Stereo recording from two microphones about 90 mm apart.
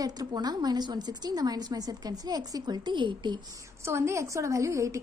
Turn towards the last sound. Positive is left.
turn(degrees=-35)  # may be behind; listen again after turning